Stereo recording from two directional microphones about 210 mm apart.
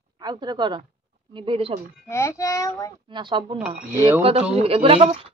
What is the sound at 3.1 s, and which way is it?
Speech, 20° right (ahead or behind).